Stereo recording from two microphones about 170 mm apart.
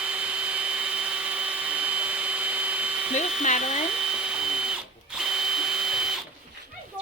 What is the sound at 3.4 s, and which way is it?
Hair dryer, 45° left (ahead or behind).